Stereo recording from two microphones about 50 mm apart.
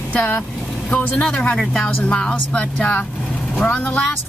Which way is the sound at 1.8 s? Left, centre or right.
Left.